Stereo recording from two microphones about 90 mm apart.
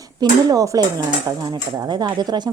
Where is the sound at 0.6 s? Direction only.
35° right (ahead or behind).